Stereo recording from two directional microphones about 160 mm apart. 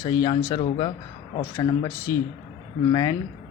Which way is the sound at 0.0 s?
30° left (ahead or behind).